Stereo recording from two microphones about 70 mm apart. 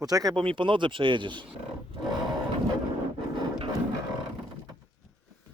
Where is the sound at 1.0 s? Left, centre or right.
Right.